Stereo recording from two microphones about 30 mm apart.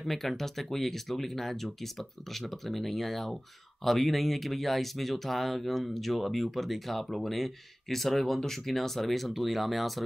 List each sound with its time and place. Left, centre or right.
0.0 s speech: centre